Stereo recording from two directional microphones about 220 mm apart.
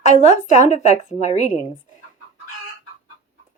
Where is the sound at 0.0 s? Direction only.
30° left (ahead or behind).